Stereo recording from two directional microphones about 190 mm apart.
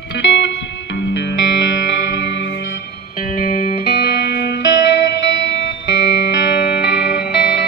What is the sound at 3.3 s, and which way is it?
Music, 45° left (ahead or behind).